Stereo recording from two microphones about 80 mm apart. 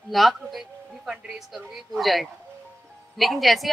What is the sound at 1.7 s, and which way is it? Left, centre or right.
Speech, centre.